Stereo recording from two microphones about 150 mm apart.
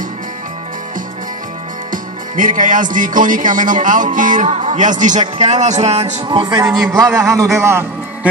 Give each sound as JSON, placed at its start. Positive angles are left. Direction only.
{"t": 1.9, "sound": "speech", "side_deg": -60}
{"t": 6.2, "sound": "a man's voice", "side_deg": -30}